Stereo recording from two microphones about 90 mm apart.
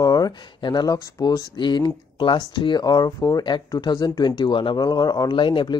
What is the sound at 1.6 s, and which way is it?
Speech, 55° left (ahead or behind).